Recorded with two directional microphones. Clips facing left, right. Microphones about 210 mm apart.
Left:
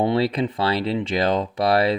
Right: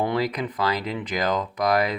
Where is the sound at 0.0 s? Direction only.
25° left (ahead or behind).